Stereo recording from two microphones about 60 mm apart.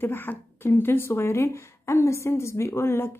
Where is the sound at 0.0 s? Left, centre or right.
Left.